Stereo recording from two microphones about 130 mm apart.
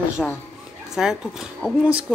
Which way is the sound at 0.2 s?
5° left (ahead or behind).